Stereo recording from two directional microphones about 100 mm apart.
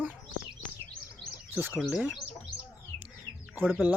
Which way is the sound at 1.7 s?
Centre (ahead or behind).